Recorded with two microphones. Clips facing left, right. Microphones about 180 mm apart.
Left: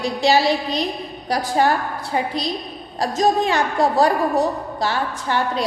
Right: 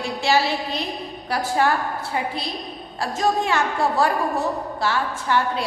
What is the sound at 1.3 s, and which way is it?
A woman's voice, 35° left (ahead or behind).